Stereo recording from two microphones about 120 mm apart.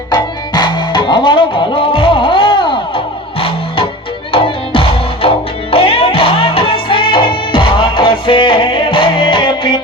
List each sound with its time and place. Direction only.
0.1 s music: 40° left (ahead or behind)
4.3 s music: 50° left (ahead or behind)